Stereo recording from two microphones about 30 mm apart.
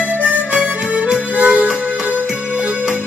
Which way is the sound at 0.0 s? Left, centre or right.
Right.